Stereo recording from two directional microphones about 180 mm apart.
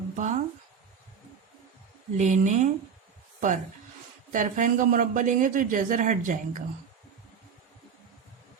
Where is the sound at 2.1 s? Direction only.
40° right (ahead or behind).